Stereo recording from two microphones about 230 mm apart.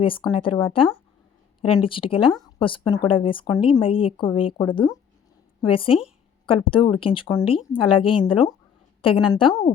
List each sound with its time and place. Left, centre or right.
0.0 s a woman's voice: left